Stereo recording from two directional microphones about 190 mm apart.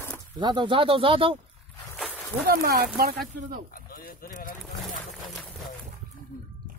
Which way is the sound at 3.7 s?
50° left (ahead or behind).